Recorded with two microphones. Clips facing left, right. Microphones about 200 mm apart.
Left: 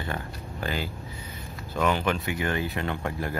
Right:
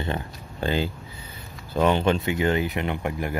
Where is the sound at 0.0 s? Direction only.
25° right (ahead or behind).